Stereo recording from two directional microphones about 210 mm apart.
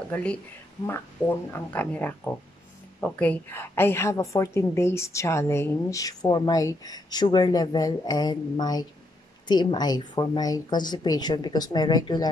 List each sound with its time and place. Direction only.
0.1 s a woman's voice: 5° left (ahead or behind)